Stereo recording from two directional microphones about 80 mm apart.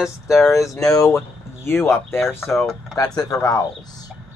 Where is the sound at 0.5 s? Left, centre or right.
Left.